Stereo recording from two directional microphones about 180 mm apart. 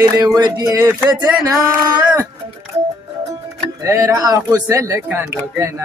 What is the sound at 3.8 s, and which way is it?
A man's voice, 15° right (ahead or behind).